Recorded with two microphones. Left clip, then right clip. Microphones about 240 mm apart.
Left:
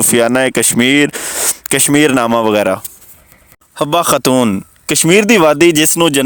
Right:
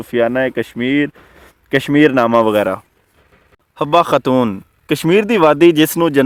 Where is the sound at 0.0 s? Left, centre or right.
Left.